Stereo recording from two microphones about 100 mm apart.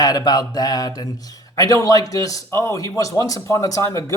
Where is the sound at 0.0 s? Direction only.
40° left (ahead or behind).